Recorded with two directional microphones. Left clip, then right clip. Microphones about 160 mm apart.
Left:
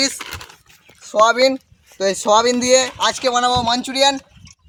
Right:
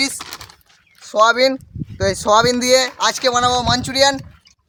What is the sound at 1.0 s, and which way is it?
Dog, 10° right (ahead or behind).